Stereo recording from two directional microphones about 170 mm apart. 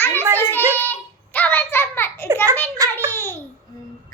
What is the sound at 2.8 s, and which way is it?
Speech, 20° right (ahead or behind).